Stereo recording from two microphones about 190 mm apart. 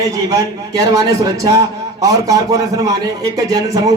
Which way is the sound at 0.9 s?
20° right (ahead or behind).